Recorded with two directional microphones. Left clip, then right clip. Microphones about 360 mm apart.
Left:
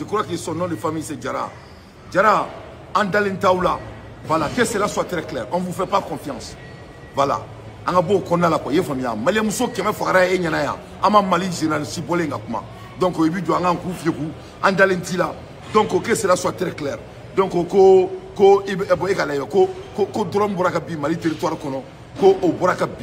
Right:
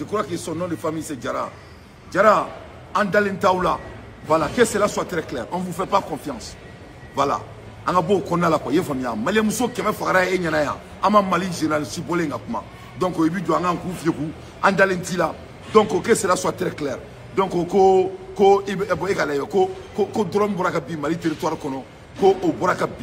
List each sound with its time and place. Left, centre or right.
0.1 s a man's voice: centre